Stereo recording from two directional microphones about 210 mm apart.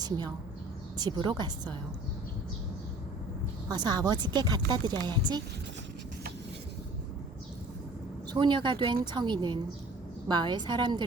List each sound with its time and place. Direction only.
0.9 s speech: 20° right (ahead or behind)
3.7 s speech: 20° right (ahead or behind)
8.3 s speech: 20° right (ahead or behind)